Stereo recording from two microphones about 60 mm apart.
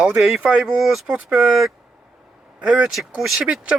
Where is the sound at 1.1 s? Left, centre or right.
Right.